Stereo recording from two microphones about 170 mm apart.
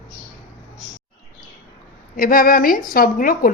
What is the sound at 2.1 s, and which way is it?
A woman's voice, 55° left (ahead or behind).